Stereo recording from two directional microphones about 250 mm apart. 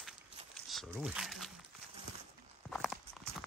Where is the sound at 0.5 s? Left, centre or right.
Centre.